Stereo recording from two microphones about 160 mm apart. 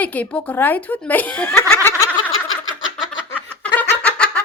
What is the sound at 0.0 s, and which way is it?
Speech, 10° left (ahead or behind).